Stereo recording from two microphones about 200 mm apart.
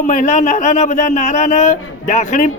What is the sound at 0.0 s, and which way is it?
A man's voice, 40° left (ahead or behind).